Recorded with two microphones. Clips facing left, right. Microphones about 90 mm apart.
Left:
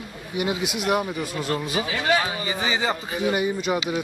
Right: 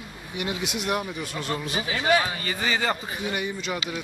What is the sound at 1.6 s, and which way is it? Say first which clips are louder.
Speech: left 3 dB; 35° right (ahead or behind).